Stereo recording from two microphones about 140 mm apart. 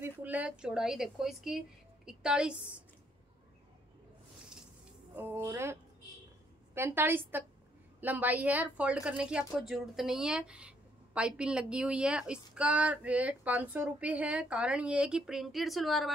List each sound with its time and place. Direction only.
0.0 s a woman's voice: 10° right (ahead or behind)
5.1 s a woman's voice: 15° right (ahead or behind)